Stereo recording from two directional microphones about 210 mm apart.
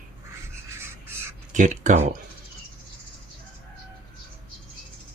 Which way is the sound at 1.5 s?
35° right (ahead or behind).